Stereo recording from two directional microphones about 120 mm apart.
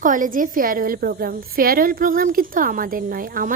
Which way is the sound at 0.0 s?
90° right.